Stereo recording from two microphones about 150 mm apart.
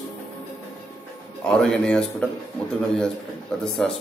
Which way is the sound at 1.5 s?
5° left (ahead or behind).